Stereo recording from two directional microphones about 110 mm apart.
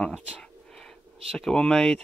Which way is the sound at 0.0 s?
5° left (ahead or behind).